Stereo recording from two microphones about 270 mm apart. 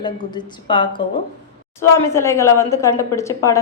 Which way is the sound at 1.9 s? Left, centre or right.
Centre.